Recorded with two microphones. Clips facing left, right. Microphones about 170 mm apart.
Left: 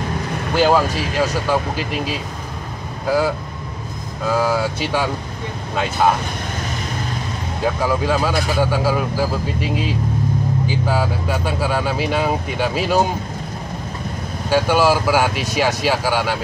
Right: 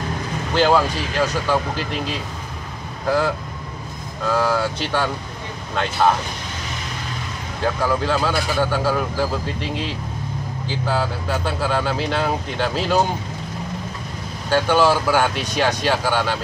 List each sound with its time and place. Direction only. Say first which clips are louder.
0.6 s speech: left 1 dB; 10° left (ahead or behind)
7.6 s speech: left 1 dB; 10° left (ahead or behind)
14.5 s speech: left 1 dB; 10° left (ahead or behind)